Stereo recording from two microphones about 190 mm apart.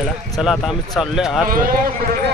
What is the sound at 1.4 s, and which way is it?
Speech, 50° right (ahead or behind).